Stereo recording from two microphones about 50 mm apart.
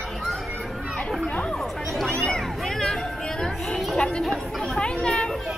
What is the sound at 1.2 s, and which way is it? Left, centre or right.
Chatter, left.